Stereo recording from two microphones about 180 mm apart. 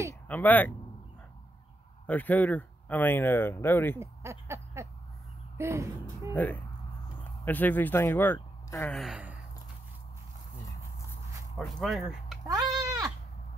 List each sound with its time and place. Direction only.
0.1 s speech: 10° left (ahead or behind)
2.0 s speech: 10° left (ahead or behind)
4.0 s a sound: 15° right (ahead or behind)
5.6 s speech: 15° right (ahead or behind)
6.3 s speech: 10° left (ahead or behind)
8.9 s gasp: centre (ahead or behind)
11.5 s speech: centre (ahead or behind)
12.7 s goat: 20° right (ahead or behind)